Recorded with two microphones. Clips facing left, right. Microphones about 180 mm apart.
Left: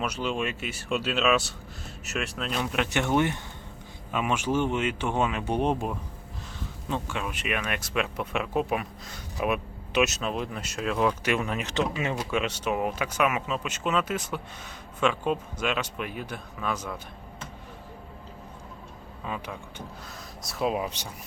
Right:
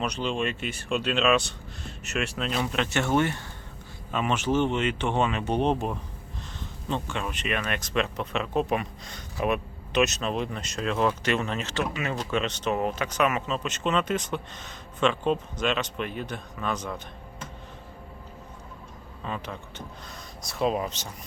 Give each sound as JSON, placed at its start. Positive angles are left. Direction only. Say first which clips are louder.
{"t": 0.0, "sound": "speech", "louder": "right 1 dB", "side_deg": 5}
{"t": 2.8, "sound": "speech", "louder": "even", "side_deg": 15}
{"t": 12.1, "sound": "speech", "louder": "even", "side_deg": 10}
{"t": 19.2, "sound": "speech", "louder": "right 1 dB", "side_deg": 10}